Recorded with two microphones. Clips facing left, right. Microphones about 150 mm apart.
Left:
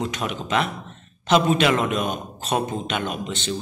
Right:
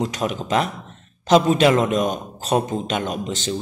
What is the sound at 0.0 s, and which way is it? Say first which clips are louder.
A man's voice: right 3 dB; 35° right (ahead or behind).